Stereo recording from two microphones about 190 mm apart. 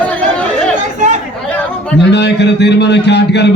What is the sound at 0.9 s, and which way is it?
Chatter, 40° right (ahead or behind).